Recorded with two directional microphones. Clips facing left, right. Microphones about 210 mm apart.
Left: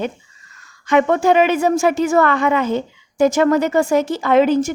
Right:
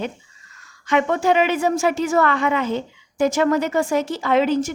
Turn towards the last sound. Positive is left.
turn(degrees=50)  # may be behind; listen again after turning